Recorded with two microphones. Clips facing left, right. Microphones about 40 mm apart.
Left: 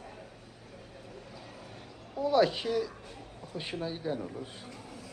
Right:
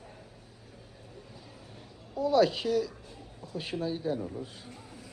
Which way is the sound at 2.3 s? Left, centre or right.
Centre.